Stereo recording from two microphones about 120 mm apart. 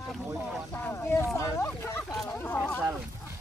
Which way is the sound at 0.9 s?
25° left (ahead or behind).